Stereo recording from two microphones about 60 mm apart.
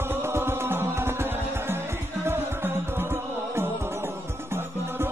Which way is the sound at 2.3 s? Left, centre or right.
Right.